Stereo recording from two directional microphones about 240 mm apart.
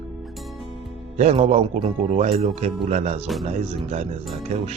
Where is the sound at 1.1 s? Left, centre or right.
Right.